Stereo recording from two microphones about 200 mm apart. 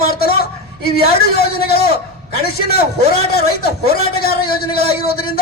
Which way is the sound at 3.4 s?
50° left (ahead or behind).